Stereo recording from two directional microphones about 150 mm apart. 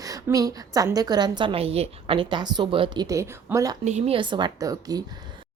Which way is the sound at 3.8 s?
45° right (ahead or behind).